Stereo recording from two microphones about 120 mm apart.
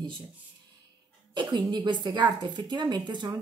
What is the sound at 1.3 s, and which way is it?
A woman's voice, 40° right (ahead or behind).